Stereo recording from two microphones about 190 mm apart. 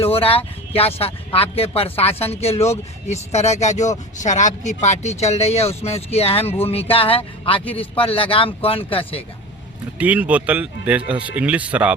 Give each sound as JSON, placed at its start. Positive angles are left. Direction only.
{"t": 0.0, "sound": "speech", "side_deg": 30}
{"t": 10.0, "sound": "speech", "side_deg": -5}